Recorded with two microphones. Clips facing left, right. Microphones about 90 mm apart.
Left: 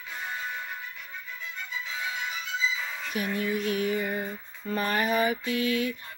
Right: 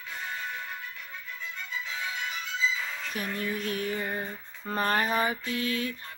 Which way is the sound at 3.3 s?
10° left (ahead or behind).